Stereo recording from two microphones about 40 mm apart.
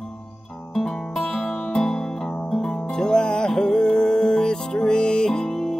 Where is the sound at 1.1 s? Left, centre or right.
Centre.